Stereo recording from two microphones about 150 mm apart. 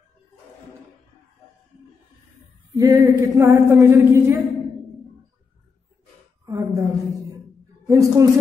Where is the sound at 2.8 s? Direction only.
20° right (ahead or behind).